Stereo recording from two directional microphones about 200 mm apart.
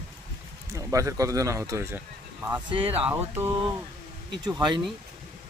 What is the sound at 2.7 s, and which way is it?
Speech, 25° right (ahead or behind).